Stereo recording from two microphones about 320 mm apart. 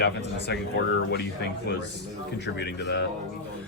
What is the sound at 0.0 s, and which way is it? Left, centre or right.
Speech, left.